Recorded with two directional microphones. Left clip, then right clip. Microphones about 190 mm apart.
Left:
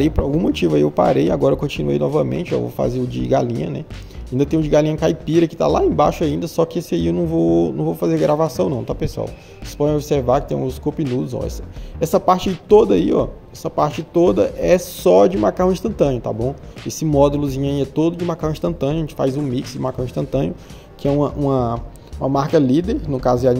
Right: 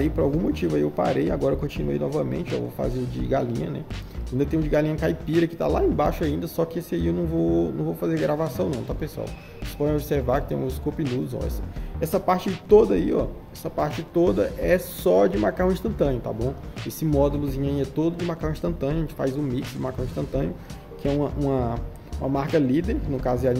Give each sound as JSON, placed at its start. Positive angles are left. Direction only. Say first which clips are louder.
{"t": 0.0, "sound": "speech", "louder": "left 5 dB", "side_deg": 35}
{"t": 2.5, "sound": "a man's voice", "louder": "left 8 dB", "side_deg": 0}
{"t": 3.1, "sound": "speech", "louder": "left 7 dB", "side_deg": 30}
{"t": 21.5, "sound": "speech", "louder": "left 6 dB", "side_deg": 25}